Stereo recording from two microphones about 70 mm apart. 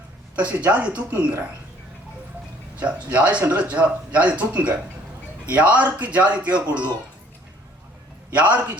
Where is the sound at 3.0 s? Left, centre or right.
Centre.